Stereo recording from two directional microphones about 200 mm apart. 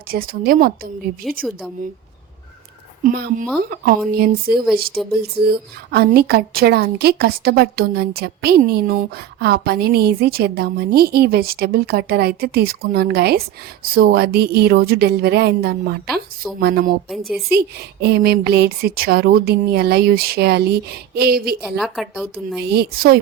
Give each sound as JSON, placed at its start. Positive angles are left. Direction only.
{"t": 0.1, "sound": "speech", "side_deg": -45}
{"t": 1.4, "sound": "a woman's voice", "side_deg": 0}
{"t": 3.0, "sound": "speech", "side_deg": -45}
{"t": 17.1, "sound": "a woman's voice", "side_deg": 0}
{"t": 17.5, "sound": "speech", "side_deg": -55}
{"t": 21.6, "sound": "a woman's voice", "side_deg": 0}
{"t": 22.6, "sound": "speech", "side_deg": -55}